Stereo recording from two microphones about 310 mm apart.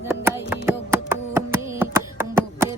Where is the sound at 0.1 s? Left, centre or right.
Centre.